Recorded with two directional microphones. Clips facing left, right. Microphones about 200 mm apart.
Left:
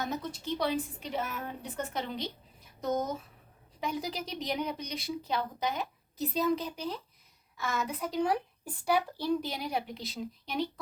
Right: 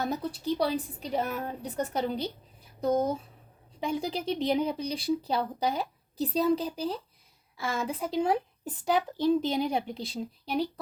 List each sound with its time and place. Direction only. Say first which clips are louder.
0.0 s speech: right 4 dB; 35° right (ahead or behind)